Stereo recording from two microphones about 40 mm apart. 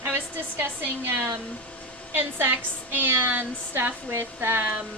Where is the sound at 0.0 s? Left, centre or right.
Right.